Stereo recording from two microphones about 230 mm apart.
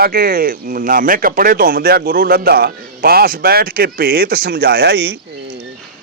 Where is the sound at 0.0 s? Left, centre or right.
Right.